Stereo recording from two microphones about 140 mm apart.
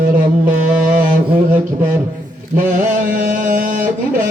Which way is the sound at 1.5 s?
75° right (ahead or behind).